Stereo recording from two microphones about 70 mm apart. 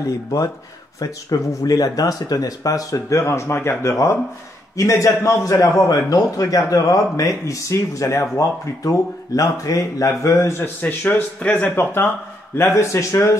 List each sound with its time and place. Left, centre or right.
0.0 s speech: left
4.7 s speech: left
5.9 s speech: left
10.8 s speech: left